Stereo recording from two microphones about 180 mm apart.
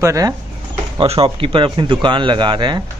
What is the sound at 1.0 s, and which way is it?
Speech, 35° right (ahead or behind).